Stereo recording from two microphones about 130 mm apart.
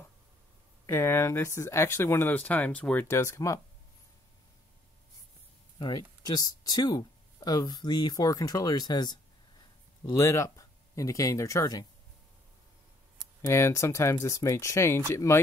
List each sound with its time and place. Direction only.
0.8 s speech: 20° left (ahead or behind)
5.8 s speech: 35° left (ahead or behind)
13.5 s speech: 20° left (ahead or behind)